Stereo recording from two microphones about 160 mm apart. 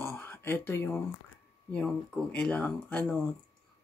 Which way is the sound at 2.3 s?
10° left (ahead or behind).